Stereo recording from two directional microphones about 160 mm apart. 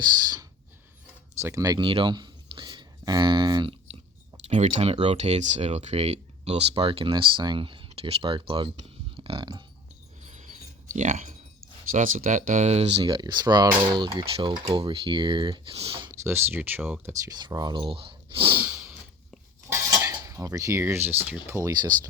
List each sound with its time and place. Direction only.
1.4 s a sound: 20° right (ahead or behind)
4.4 s speech: 50° right (ahead or behind); by 9.6 s 30° right (ahead or behind)
10.2 s filing: 50° right (ahead or behind)
11.9 s speech: 55° right (ahead or behind); by 16.0 s 35° right (ahead or behind)
16.0 s speech: 15° right (ahead or behind)
18.6 s a sound: 20° right (ahead or behind)
19.7 s cutlery: 20° right (ahead or behind)